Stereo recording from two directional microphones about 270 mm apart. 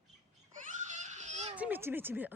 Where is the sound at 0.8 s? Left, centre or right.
Right.